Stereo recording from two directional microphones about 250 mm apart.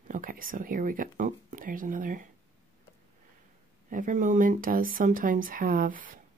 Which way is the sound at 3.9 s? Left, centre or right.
Right.